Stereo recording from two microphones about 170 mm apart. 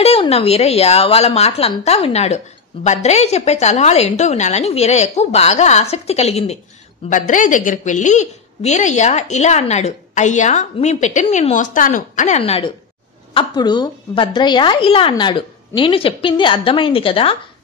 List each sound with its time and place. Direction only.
0.0 s speech: 35° left (ahead or behind)
7.1 s a woman's voice: 50° left (ahead or behind); by 17.4 s 35° left (ahead or behind)